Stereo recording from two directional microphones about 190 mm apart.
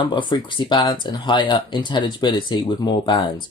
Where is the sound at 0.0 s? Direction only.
25° left (ahead or behind).